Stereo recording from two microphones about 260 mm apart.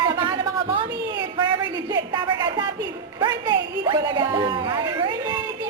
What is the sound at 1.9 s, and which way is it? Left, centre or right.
Speech, centre.